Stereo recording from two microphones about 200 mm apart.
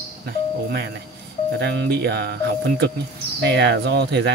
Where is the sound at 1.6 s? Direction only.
55° right (ahead or behind).